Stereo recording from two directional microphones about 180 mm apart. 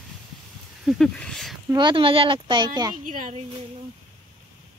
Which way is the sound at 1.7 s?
25° right (ahead or behind).